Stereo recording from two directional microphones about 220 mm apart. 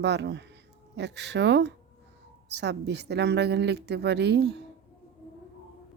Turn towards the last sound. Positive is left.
turn(degrees=-50)  # may be behind; listen again after turning